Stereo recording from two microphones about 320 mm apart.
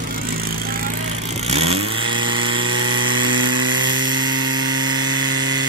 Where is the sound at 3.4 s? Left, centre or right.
Centre.